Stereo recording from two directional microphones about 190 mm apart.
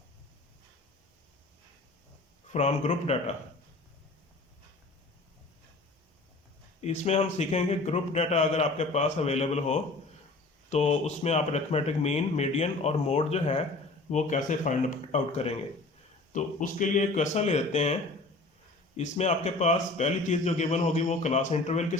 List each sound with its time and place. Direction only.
2.5 s a man's voice: 35° left (ahead or behind)
6.8 s a man's voice: 35° left (ahead or behind)
18.9 s a man's voice: 35° left (ahead or behind)